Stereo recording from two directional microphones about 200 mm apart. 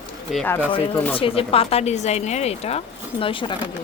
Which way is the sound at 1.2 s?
25° left (ahead or behind).